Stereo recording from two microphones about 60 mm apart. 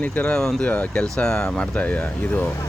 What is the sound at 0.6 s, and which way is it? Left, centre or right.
Speech, left.